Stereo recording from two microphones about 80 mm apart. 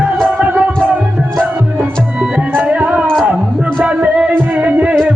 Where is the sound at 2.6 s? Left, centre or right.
Centre.